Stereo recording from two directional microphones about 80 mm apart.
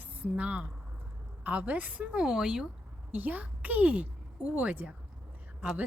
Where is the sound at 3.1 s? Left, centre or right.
Right.